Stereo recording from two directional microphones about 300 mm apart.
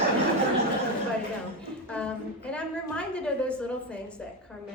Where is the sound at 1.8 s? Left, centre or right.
Centre.